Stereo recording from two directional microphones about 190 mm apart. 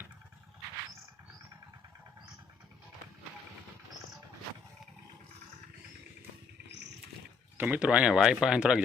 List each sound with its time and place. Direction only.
7.6 s speech: 5° right (ahead or behind)